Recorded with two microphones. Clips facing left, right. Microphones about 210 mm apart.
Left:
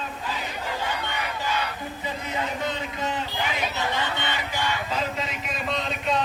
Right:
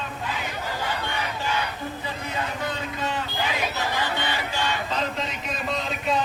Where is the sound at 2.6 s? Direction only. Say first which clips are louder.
Even; 20° left (ahead or behind).